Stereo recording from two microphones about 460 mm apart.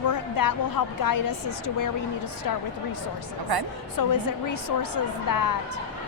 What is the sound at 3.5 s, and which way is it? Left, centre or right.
Speech, right.